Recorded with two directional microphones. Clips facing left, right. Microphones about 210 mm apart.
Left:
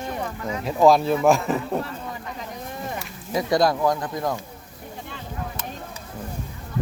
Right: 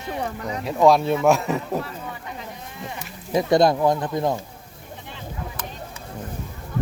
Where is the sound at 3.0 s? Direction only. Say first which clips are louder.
Right 6 dB; 25° right (ahead or behind).